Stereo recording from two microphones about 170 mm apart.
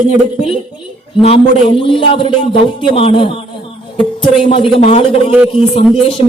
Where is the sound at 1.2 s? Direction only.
35° left (ahead or behind).